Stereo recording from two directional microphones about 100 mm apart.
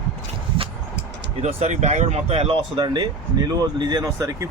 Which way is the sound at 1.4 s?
90° right.